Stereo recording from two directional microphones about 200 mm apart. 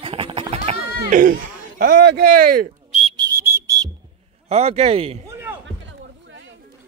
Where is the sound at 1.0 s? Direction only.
40° right (ahead or behind).